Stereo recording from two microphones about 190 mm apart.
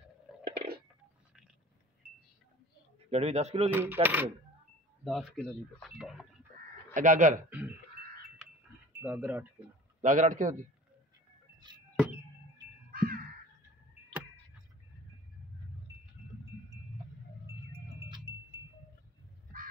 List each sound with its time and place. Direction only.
0.4 s a sound: 60° right (ahead or behind)
3.1 s a man's voice: 35° right (ahead or behind)
3.7 s speech: 10° right (ahead or behind)
5.0 s speech: centre (ahead or behind)
6.9 s speech: 40° right (ahead or behind)
7.4 s speech: 10° right (ahead or behind)
9.0 s speech: 10° right (ahead or behind)
10.0 s speech: 45° right (ahead or behind)
12.9 s crow: 50° right (ahead or behind)